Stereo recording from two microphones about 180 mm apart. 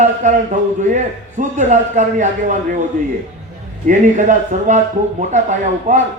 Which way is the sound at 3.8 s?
45° right (ahead or behind).